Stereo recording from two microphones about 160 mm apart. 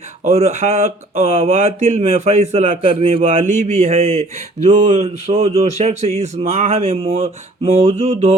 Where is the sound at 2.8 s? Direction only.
35° right (ahead or behind).